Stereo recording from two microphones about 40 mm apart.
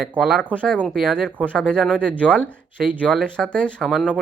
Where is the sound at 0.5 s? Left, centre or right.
Right.